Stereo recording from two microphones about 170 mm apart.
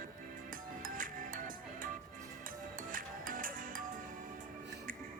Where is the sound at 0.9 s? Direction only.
55° right (ahead or behind).